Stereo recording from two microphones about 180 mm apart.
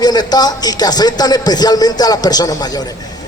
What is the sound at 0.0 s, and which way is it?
A man's voice, 20° left (ahead or behind).